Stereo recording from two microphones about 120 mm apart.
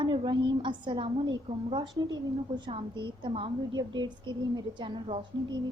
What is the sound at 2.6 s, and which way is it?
A woman's voice, 45° right (ahead or behind).